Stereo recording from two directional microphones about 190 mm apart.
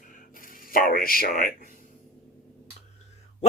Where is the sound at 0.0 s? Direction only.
45° left (ahead or behind).